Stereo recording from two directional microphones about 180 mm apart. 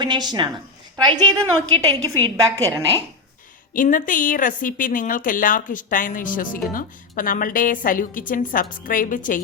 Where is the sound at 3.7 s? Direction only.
50° left (ahead or behind).